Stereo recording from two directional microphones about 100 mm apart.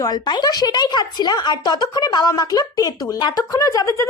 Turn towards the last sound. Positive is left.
turn(degrees=35)  # may be behind; listen again after turning